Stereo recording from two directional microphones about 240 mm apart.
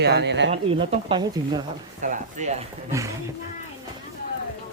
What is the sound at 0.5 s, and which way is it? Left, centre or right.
Speech, right.